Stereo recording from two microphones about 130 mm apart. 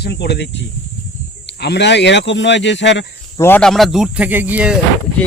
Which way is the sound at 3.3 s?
15° left (ahead or behind).